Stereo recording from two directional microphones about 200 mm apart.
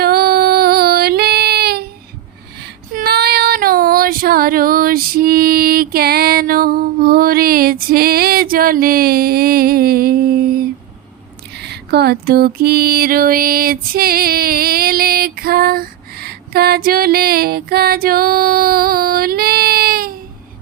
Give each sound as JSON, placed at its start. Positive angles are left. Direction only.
{"t": 0.0, "sound": "child singing", "side_deg": -50}
{"t": 11.5, "sound": "music", "side_deg": -55}